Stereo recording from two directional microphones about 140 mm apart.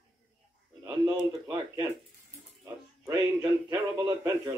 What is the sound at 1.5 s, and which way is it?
Speech, 30° right (ahead or behind).